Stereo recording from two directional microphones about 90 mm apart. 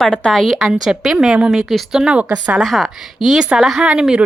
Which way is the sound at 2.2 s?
40° right (ahead or behind).